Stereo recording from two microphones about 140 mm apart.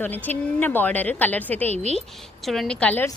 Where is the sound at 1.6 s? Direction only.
50° right (ahead or behind).